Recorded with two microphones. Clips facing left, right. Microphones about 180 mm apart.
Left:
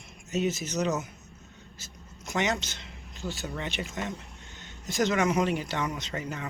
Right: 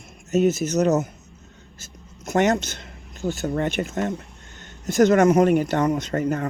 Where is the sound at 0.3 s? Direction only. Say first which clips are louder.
Right 9 dB; 45° right (ahead or behind).